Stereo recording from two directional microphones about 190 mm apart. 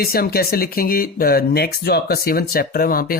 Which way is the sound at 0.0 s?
55° left (ahead or behind).